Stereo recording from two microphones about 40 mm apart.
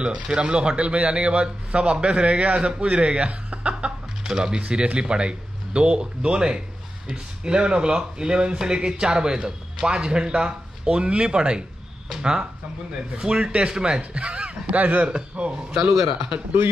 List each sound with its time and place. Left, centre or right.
0.0 s speech: right
4.2 s speech: centre
14.8 s a man's voice: right
15.0 s speech: right